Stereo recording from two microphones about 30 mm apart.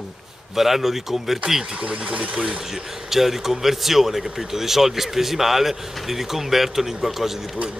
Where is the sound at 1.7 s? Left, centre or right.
Right.